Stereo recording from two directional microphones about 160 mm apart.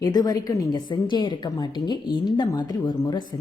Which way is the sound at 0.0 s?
25° left (ahead or behind).